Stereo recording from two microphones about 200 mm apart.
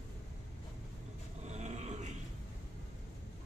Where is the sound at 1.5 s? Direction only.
35° right (ahead or behind).